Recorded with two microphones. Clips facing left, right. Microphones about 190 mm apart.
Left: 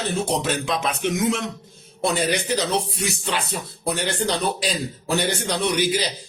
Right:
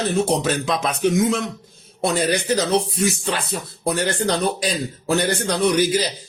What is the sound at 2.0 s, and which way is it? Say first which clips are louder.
Speech: right 2 dB; 45° right (ahead or behind).